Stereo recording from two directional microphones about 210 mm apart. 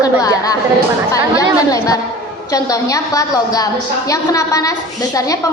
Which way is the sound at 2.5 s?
15° left (ahead or behind).